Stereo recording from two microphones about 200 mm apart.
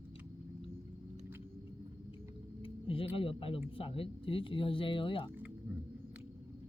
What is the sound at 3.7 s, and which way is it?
Speech, 25° left (ahead or behind).